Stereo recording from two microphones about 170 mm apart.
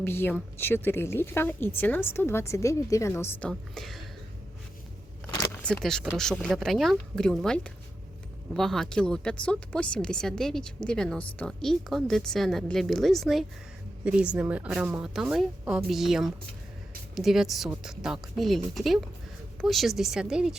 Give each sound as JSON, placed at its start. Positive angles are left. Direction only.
{"t": 0.0, "sound": "a woman's voice", "side_deg": 15}
{"t": 3.5, "sound": "a woman's voice", "side_deg": 0}
{"t": 5.2, "sound": "a sound", "side_deg": 20}
{"t": 5.6, "sound": "a woman's voice", "side_deg": 5}